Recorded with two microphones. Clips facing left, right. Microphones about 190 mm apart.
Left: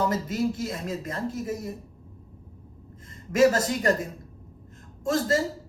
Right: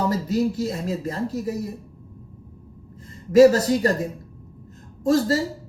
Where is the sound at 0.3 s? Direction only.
35° right (ahead or behind).